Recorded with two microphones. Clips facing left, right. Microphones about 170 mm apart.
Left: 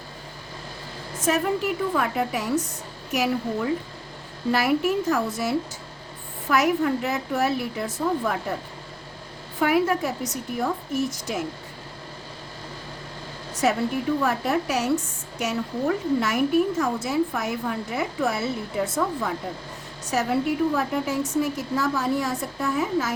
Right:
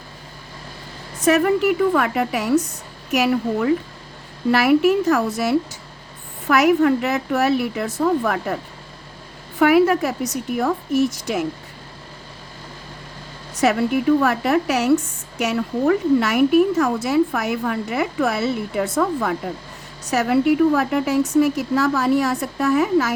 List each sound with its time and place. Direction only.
1.2 s speech: 70° right (ahead or behind)
9.6 s speech: 70° right (ahead or behind)
13.6 s speech: 75° right (ahead or behind)